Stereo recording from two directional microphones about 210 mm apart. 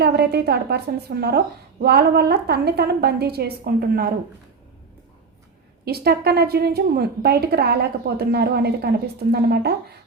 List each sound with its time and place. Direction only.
0.0 s a woman's voice: 50° right (ahead or behind)
5.8 s a woman's voice: 50° right (ahead or behind)